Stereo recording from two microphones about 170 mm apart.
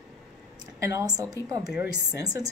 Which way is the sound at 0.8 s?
20° right (ahead or behind).